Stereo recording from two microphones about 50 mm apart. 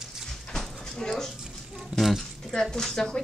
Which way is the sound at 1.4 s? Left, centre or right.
Centre.